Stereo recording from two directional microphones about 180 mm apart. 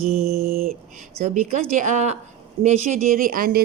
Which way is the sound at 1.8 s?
40° right (ahead or behind).